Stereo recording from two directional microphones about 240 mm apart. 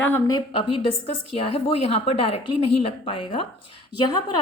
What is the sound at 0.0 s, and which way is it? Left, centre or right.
A woman's voice, centre.